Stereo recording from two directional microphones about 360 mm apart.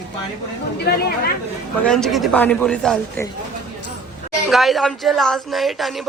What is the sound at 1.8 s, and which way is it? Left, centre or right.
A man's voice, centre.